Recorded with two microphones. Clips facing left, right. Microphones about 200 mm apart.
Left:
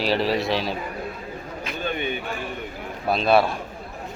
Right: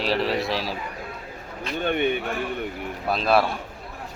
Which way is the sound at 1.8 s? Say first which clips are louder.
Right 5 dB; 60° right (ahead or behind).